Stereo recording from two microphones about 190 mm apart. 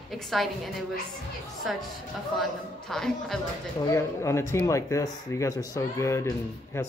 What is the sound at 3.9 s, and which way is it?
Speech, 15° left (ahead or behind).